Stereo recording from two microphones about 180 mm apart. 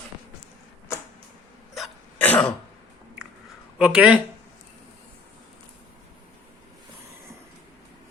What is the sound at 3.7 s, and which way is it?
Speech, 5° right (ahead or behind).